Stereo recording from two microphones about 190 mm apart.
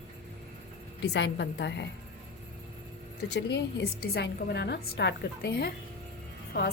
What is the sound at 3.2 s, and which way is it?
A woman's voice, 60° left (ahead or behind).